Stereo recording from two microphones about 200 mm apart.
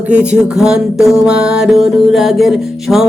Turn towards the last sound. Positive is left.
turn(degrees=0)  # may be behind; listen again after turning